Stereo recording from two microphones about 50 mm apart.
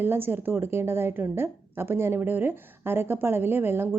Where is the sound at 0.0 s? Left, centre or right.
Right.